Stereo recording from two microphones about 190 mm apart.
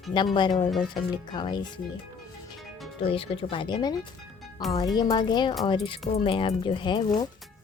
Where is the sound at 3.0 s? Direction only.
30° left (ahead or behind).